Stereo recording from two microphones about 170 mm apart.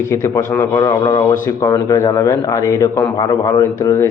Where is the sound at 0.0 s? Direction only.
15° left (ahead or behind).